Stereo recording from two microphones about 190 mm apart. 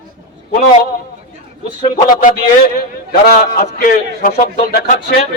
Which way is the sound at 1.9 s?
50° left (ahead or behind).